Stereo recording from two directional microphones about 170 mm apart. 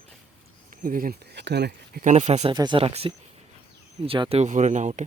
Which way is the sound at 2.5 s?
25° right (ahead or behind).